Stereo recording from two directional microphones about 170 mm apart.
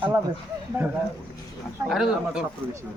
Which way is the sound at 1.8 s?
5° right (ahead or behind).